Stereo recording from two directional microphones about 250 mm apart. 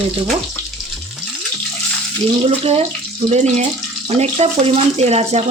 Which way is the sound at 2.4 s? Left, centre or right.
Right.